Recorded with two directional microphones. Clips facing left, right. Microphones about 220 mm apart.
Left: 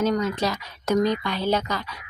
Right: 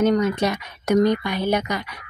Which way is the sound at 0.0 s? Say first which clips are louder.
Right 4 dB; 20° right (ahead or behind).